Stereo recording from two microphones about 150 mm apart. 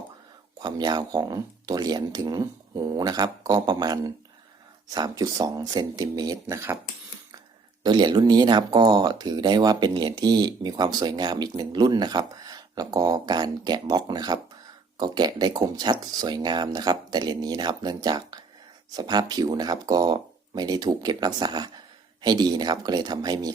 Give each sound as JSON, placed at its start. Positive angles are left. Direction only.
{"t": 0.6, "sound": "speech", "side_deg": -30}
{"t": 7.9, "sound": "speech", "side_deg": -30}